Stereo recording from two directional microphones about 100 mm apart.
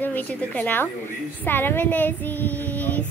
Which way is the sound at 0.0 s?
15° left (ahead or behind).